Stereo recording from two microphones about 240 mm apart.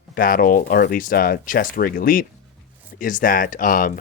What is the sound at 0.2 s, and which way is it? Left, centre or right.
Speech, left.